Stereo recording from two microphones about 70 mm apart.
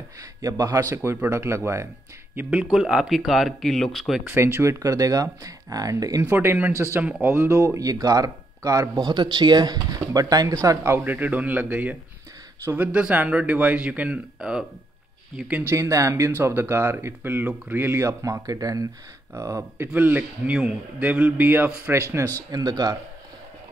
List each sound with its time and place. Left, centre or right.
0.2 s speech: right
2.7 s speech: centre
4.3 s speech: right
6.3 s speech: right
9.0 s speech: right
11.1 s a man's voice: right
15.3 s a man's voice: centre
15.6 s speech: right
16.3 s speech: right
18.4 s speech: right
19.3 s speech: right
19.8 s a man's voice: right
21.9 s speech: right
22.5 s speech: right